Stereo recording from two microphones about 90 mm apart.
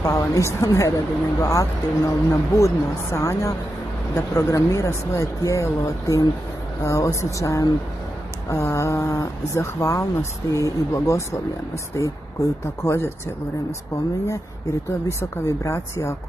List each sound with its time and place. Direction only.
0.0 s speech: 35° left (ahead or behind)
14.2 s speech: 35° left (ahead or behind)